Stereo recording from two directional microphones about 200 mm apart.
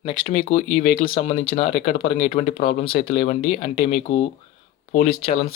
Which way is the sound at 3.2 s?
30° left (ahead or behind).